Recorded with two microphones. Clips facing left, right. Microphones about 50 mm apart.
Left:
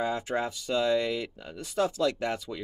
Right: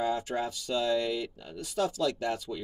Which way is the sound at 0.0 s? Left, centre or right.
Left.